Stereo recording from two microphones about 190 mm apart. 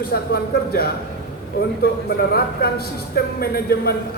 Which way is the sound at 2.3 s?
55° left (ahead or behind).